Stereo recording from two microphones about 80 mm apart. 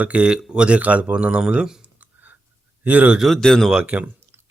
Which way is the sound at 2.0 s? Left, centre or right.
Right.